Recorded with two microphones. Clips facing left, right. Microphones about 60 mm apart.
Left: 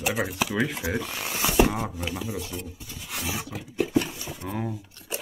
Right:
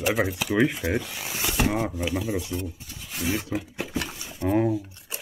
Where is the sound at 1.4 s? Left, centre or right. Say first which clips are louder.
Left 4 dB; centre.